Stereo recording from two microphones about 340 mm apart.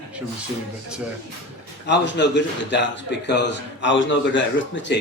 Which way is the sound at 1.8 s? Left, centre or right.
Left.